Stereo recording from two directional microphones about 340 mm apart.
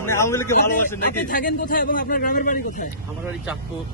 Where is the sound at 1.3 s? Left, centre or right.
Left.